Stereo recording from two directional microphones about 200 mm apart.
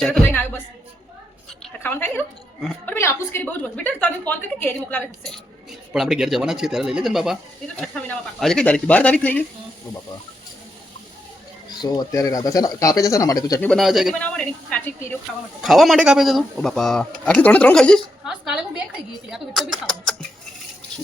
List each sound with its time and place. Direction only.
0.0 s speech: 5° left (ahead or behind)
1.5 s a sound: 10° left (ahead or behind)
2.6 s a woman's voice: 5° left (ahead or behind)
11.7 s a woman's voice: 20° left (ahead or behind)
13.7 s speech: centre (ahead or behind)